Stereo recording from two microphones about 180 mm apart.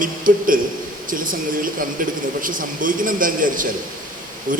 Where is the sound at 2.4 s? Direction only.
50° right (ahead or behind).